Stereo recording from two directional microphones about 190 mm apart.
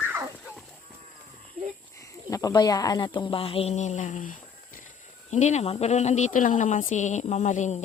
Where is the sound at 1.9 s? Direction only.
15° left (ahead or behind).